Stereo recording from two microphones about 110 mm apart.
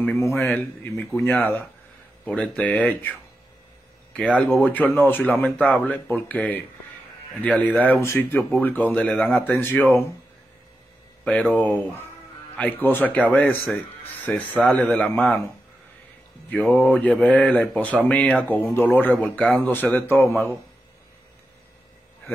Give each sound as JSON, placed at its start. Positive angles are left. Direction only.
{"t": 0.2, "sound": "a man's voice", "side_deg": 25}
{"t": 12.5, "sound": "speech", "side_deg": 15}
{"t": 16.4, "sound": "speech", "side_deg": 10}